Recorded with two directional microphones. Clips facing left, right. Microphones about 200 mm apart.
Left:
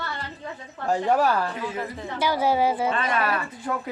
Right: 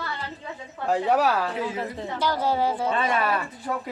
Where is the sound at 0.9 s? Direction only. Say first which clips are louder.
Even; 5° right (ahead or behind).